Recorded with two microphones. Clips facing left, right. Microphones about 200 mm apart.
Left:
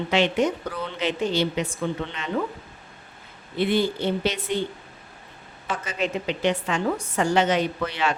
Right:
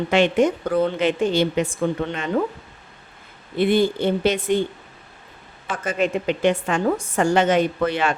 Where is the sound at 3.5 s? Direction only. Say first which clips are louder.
Right 4 dB; 50° right (ahead or behind).